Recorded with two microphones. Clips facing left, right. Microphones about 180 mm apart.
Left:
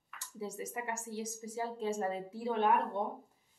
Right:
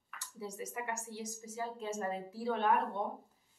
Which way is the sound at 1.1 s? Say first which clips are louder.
Left 3 dB; 30° left (ahead or behind).